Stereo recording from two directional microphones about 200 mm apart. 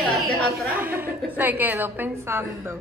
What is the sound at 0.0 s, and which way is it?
A woman's voice, centre (ahead or behind).